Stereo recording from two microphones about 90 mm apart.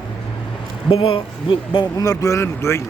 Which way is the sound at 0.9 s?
90° left.